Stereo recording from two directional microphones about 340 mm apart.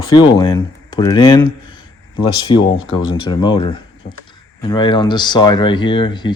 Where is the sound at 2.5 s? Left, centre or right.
Left.